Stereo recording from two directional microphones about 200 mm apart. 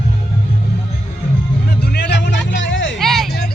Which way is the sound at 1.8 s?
55° left (ahead or behind).